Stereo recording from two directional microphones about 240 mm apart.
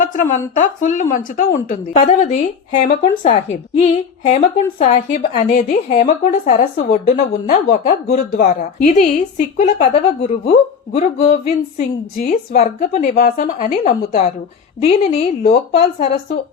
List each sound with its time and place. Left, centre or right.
0.0 s a woman's voice: left